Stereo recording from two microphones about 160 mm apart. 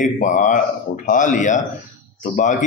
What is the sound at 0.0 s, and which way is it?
A man's voice, 50° left (ahead or behind).